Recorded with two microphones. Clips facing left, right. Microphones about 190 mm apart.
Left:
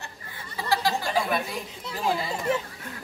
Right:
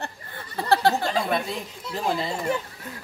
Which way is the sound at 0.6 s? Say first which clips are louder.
Right 5 dB; 60° right (ahead or behind).